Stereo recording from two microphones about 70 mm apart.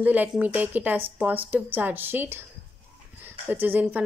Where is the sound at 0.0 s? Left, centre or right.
Right.